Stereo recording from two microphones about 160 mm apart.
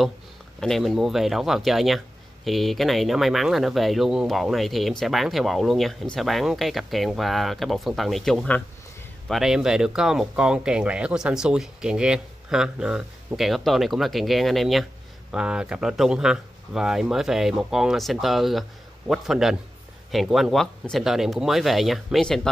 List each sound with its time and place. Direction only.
0.6 s speech: centre (ahead or behind)